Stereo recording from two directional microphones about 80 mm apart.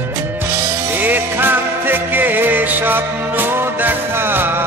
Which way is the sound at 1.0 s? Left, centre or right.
Right.